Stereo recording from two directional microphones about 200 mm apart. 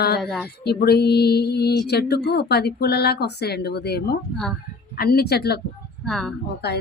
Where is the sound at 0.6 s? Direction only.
55° left (ahead or behind).